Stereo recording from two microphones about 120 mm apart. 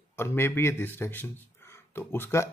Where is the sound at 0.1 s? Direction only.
20° left (ahead or behind).